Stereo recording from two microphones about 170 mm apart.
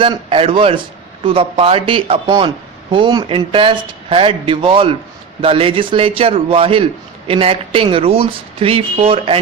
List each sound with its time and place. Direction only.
0.0 s speech: 30° right (ahead or behind)